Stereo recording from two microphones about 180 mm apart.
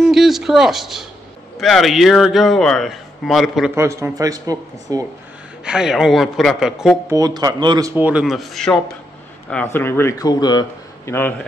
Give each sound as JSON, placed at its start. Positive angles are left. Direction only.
{"t": 0.0, "sound": "a man's voice", "side_deg": 0}
{"t": 3.7, "sound": "a man's voice", "side_deg": -15}
{"t": 5.7, "sound": "a man's voice", "side_deg": -5}
{"t": 7.1, "sound": "a man's voice", "side_deg": -20}
{"t": 7.9, "sound": "a man's voice", "side_deg": -10}